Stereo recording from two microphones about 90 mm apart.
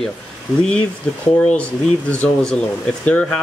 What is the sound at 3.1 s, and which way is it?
Speech, 15° left (ahead or behind).